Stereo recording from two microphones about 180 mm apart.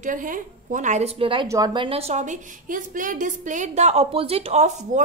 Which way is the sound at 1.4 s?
20° right (ahead or behind).